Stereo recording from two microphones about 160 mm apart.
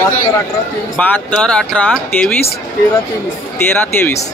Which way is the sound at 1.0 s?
10° left (ahead or behind).